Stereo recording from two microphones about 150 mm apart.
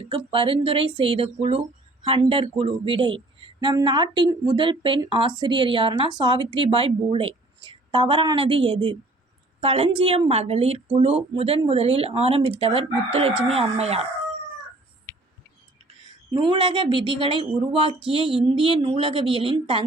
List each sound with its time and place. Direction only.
0.3 s a woman's voice: 35° right (ahead or behind)
16.3 s a woman's voice: 30° right (ahead or behind)